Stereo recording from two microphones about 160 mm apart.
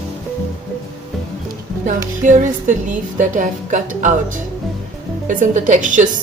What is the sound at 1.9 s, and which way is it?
A woman's voice, 55° right (ahead or behind).